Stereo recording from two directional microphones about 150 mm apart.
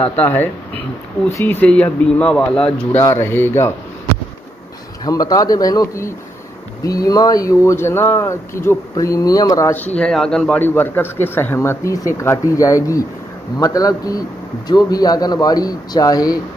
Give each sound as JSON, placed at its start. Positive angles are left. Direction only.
{"t": 0.2, "sound": "speech", "side_deg": 10}
{"t": 3.0, "sound": "speech", "side_deg": 15}
{"t": 5.0, "sound": "speech", "side_deg": 25}
{"t": 9.9, "sound": "speech", "side_deg": 5}